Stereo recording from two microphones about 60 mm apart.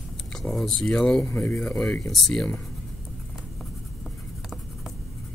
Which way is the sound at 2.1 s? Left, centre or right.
Centre.